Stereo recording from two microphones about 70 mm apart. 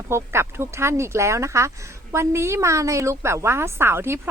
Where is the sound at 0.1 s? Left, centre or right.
Right.